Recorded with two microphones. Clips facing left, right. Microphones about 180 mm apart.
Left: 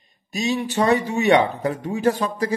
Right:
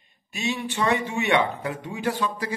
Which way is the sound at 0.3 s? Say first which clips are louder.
Left 5 dB; 40° left (ahead or behind).